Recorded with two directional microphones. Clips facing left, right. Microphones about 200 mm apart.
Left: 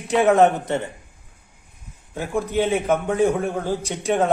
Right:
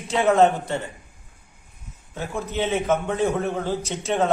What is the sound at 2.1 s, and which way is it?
Speech, 10° left (ahead or behind).